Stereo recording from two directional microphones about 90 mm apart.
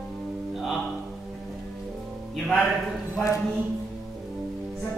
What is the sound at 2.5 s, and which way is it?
Speech, 5° left (ahead or behind).